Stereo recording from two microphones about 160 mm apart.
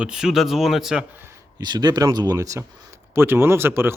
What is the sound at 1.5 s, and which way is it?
Speech, 25° right (ahead or behind).